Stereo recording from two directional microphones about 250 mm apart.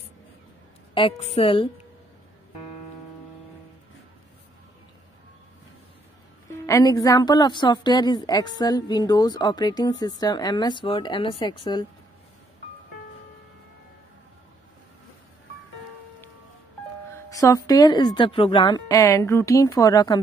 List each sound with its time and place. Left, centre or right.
0.9 s a woman's voice: left
6.6 s speech: centre
17.1 s speech: centre